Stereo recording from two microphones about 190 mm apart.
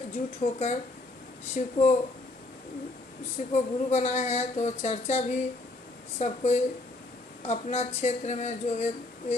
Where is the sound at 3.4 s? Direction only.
40° left (ahead or behind).